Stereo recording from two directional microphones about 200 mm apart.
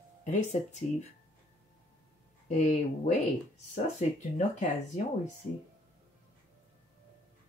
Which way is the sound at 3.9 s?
35° left (ahead or behind).